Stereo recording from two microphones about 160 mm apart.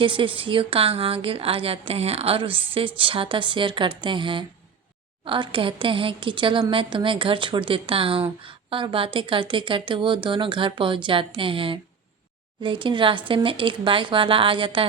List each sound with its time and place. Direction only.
0.0 s a woman's voice: 30° right (ahead or behind)